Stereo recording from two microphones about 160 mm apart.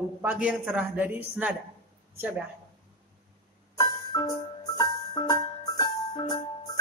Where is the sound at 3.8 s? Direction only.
25° left (ahead or behind).